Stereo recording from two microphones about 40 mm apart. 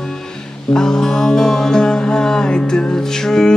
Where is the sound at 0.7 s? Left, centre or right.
Centre.